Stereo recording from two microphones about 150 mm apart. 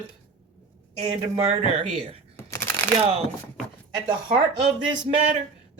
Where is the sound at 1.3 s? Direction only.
40° right (ahead or behind).